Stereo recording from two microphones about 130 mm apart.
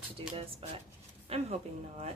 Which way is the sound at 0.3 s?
45° right (ahead or behind).